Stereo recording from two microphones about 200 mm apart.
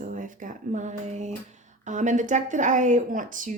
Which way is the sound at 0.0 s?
40° right (ahead or behind).